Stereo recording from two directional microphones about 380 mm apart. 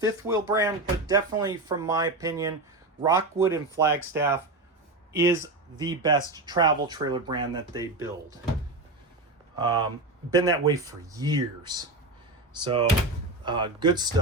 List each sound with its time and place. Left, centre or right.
0.0 s speech: centre
9.6 s speech: centre
13.4 s speech: centre